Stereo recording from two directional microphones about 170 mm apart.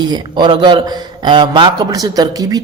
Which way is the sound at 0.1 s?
25° right (ahead or behind).